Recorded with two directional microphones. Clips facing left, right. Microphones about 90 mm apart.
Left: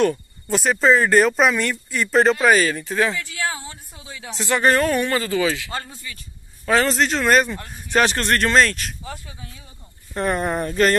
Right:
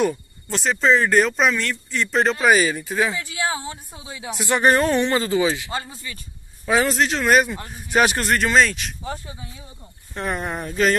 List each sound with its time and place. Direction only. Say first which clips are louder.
0.5 s speech: left 2 dB; 5° left (ahead or behind)
3.2 s a woman's voice: right 1 dB; 20° right (ahead or behind)
5.7 s speech: right 1 dB; 5° right (ahead or behind)
9.0 s speech: right 4 dB; 30° right (ahead or behind)
10.1 s speech: left 4 dB; centre (ahead or behind)